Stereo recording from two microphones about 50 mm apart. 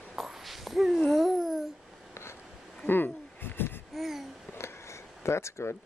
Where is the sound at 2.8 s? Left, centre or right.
Left.